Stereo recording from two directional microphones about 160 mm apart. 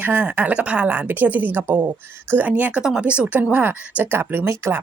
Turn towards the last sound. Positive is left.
turn(degrees=-15)  # may be behind; listen again after turning